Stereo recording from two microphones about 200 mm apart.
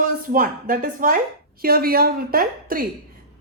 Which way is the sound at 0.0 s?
40° right (ahead or behind).